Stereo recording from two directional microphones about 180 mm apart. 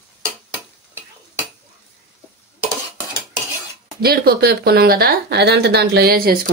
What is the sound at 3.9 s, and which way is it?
Speech, 55° right (ahead or behind).